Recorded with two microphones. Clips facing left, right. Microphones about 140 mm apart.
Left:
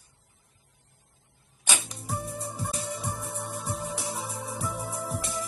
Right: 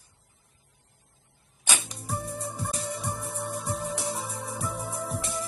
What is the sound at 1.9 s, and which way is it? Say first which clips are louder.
Music: right 1 dB; centre (ahead or behind).